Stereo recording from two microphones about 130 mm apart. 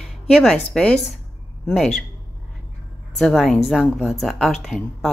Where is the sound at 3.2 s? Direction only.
5° left (ahead or behind).